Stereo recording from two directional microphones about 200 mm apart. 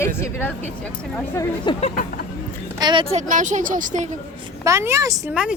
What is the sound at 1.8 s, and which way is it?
Speech, 45° left (ahead or behind).